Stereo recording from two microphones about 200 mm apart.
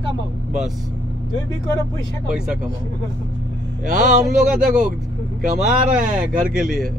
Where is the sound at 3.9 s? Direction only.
40° right (ahead or behind).